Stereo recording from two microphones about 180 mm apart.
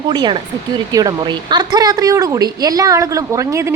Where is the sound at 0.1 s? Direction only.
25° right (ahead or behind).